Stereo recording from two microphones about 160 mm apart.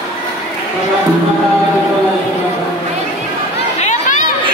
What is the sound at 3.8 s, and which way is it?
Chatter, 50° left (ahead or behind).